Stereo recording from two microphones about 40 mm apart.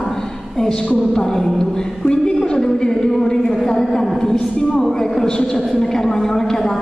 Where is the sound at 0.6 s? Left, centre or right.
Centre.